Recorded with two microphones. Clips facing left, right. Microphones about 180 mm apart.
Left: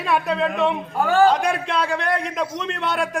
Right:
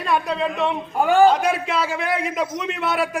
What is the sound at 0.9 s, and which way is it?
Speech, 15° right (ahead or behind).